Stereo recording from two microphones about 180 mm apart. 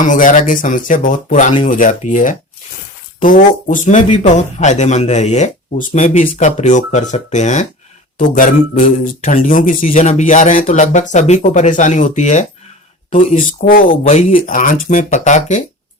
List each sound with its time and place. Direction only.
0.0 s speech: 45° left (ahead or behind)